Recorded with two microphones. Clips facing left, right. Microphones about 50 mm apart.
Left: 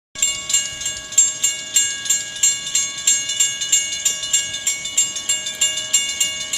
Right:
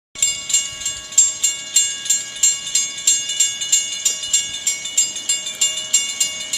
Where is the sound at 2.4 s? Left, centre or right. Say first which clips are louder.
Even; left.